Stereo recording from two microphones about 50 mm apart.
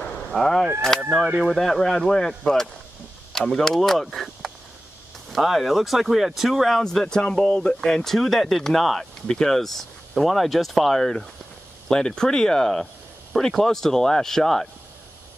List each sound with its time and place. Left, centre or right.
0.3 s speech: centre
6.8 s speech: centre